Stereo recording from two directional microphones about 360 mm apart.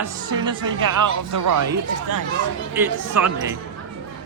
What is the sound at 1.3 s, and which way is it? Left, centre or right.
Speech, right.